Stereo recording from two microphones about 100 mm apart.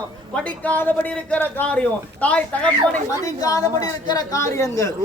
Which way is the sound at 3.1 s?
35° left (ahead or behind).